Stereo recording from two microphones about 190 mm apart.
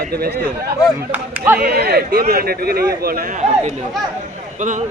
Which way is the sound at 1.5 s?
60° right (ahead or behind).